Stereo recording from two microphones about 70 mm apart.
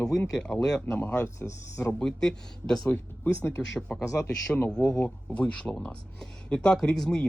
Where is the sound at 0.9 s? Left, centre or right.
Left.